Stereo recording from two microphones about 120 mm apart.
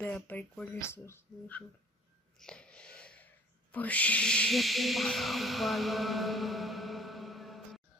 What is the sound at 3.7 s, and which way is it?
Speech, 10° left (ahead or behind).